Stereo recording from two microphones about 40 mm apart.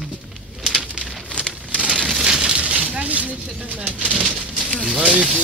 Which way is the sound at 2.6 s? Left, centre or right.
Right.